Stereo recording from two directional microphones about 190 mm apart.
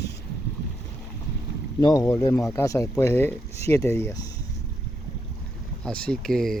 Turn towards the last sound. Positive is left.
turn(degrees=0)  # may be behind; listen again after turning